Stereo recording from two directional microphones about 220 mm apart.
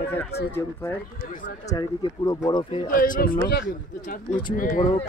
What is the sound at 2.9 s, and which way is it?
Speech, 40° left (ahead or behind).